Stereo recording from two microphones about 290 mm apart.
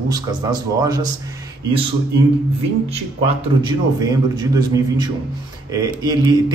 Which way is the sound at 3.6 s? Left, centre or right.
Centre.